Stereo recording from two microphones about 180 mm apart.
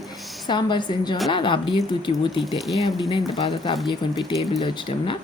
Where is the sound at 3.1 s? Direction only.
30° left (ahead or behind).